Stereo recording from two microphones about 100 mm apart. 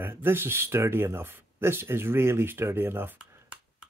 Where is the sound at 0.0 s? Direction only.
20° right (ahead or behind).